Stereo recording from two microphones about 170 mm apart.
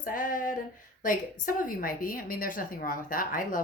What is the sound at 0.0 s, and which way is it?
A woman's voice, 55° left (ahead or behind).